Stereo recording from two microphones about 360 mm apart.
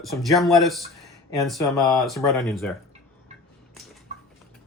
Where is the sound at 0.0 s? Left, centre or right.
Centre.